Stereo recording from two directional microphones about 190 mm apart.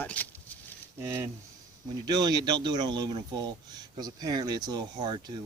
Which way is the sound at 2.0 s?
20° right (ahead or behind).